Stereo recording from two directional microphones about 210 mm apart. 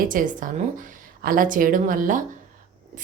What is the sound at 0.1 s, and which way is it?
Speech, 40° right (ahead or behind).